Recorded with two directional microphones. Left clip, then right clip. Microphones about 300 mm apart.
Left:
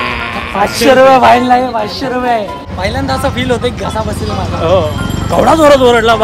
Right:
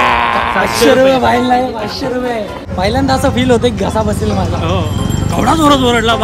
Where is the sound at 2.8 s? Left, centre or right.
Centre.